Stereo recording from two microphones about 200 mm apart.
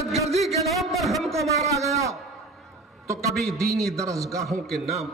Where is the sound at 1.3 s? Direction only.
15° right (ahead or behind).